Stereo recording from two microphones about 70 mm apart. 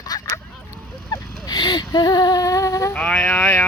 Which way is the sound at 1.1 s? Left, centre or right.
Left.